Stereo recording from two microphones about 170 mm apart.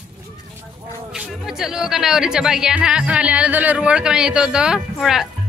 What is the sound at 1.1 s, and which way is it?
Speech, 5° right (ahead or behind).